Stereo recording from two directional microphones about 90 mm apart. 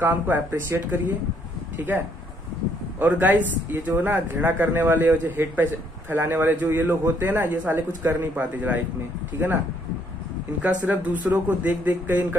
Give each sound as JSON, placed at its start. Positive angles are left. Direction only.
{"t": 0.0, "sound": "a man's voice", "side_deg": -25}
{"t": 3.0, "sound": "a man's voice", "side_deg": -20}
{"t": 10.6, "sound": "speech", "side_deg": -15}